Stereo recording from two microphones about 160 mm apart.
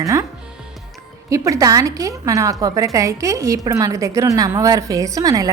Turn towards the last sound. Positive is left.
turn(degrees=-20)  # may be behind; listen again after turning